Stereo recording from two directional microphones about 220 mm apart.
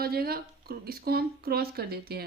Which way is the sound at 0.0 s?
45° right (ahead or behind).